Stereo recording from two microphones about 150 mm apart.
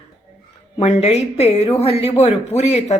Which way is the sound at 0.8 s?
45° left (ahead or behind).